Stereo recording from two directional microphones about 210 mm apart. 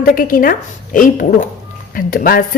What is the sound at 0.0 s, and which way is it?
A woman's voice, 40° left (ahead or behind).